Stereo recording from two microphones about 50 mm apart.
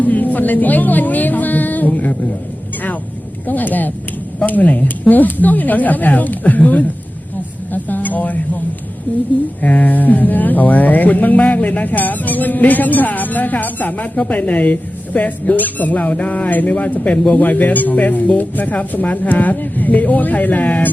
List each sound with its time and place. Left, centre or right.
0.0 s speech: left
3.4 s a woman's voice: left